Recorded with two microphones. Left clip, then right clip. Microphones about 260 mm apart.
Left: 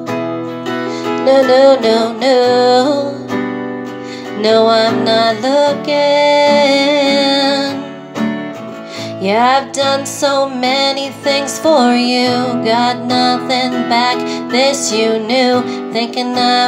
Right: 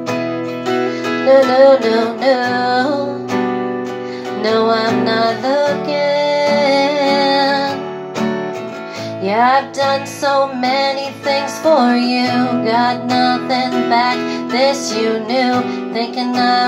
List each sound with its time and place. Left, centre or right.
0.7 s music: centre
1.2 s music: left
4.4 s music: left
9.2 s music: left